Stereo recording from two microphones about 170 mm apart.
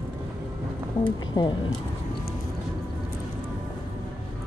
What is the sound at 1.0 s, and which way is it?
Speech, 25° left (ahead or behind).